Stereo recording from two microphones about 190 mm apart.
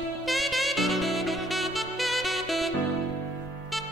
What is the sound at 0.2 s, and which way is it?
Saxophone, centre (ahead or behind).